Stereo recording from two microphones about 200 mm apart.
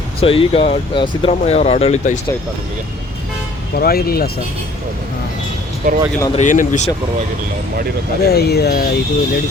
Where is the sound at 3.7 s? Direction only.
50° left (ahead or behind).